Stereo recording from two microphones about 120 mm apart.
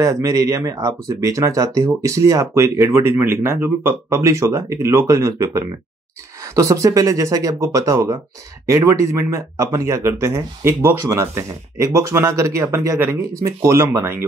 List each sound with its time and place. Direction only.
0.0 s speech: 25° right (ahead or behind)